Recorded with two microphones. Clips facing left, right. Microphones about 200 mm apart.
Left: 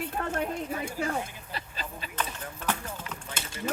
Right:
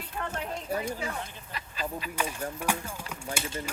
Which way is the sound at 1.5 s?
30° left (ahead or behind).